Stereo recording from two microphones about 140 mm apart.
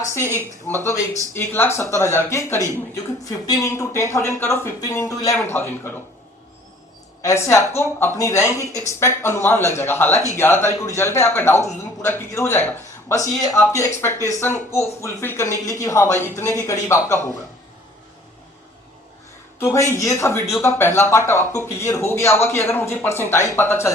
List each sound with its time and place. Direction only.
0.1 s speech: 20° left (ahead or behind)
7.2 s speech: 20° left (ahead or behind)
19.5 s speech: 20° left (ahead or behind)